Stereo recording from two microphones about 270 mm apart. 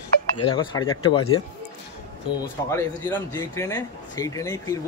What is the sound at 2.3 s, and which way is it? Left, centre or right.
Speech, centre.